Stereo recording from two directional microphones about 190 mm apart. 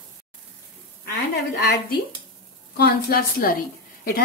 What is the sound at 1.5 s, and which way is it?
Speech, 60° left (ahead or behind).